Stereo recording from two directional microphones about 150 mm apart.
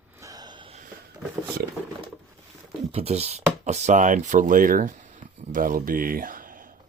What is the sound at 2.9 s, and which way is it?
Speech, 40° right (ahead or behind).